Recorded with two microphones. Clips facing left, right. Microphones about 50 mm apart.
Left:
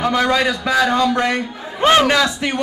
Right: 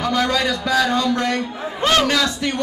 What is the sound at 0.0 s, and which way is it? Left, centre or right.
A man's voice, centre.